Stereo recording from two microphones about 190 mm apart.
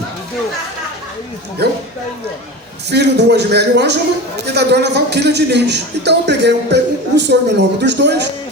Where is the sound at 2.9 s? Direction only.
60° right (ahead or behind).